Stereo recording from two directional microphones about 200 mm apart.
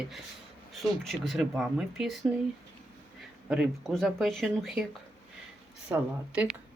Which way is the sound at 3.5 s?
Centre (ahead or behind).